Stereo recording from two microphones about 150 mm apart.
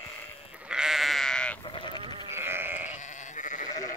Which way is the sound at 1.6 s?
35° left (ahead or behind).